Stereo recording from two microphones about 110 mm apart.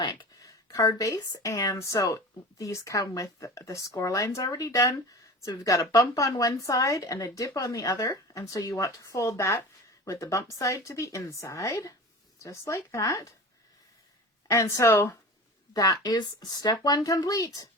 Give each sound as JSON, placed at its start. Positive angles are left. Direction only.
{"t": 0.2, "sound": "a woman's voice", "side_deg": 35}
{"t": 14.4, "sound": "speech", "side_deg": 30}
{"t": 15.7, "sound": "a woman's voice", "side_deg": 35}